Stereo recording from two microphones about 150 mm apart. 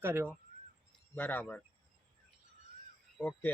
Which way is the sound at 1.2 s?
15° left (ahead or behind).